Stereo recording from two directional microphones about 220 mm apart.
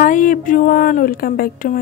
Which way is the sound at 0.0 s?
35° left (ahead or behind).